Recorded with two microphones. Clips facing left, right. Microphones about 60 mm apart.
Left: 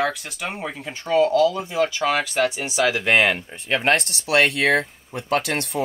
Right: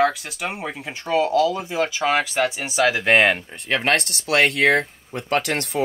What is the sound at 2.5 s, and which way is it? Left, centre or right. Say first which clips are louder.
Speech: left 1 dB; right.